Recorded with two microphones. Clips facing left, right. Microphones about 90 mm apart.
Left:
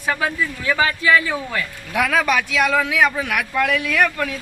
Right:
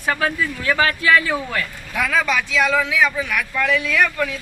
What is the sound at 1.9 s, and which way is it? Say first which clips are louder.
Speech: left 2 dB; 55° left (ahead or behind).